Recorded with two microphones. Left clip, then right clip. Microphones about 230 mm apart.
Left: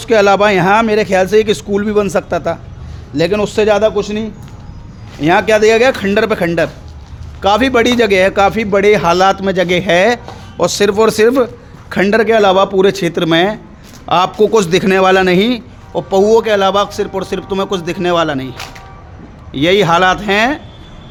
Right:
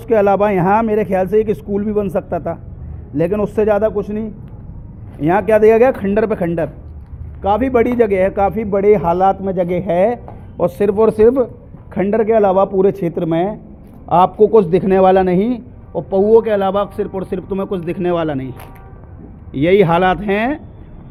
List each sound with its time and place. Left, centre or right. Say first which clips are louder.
0.0 s a man's voice: left 4 dB; left
7.5 s speech: left 3 dB; left
10.6 s a man's voice: left 3 dB; left; by 20.6 s centre